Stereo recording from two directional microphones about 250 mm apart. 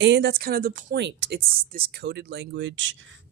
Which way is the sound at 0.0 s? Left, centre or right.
Right.